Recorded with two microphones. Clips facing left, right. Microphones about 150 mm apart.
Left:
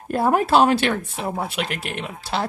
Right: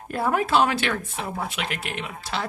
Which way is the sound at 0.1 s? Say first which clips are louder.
Left 4 dB; 40° left (ahead or behind).